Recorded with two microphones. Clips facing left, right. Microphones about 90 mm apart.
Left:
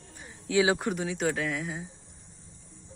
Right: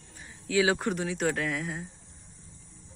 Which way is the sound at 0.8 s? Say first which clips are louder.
Even; centre (ahead or behind).